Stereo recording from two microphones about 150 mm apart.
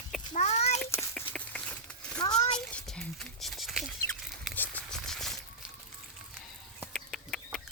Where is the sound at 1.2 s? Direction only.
10° left (ahead or behind).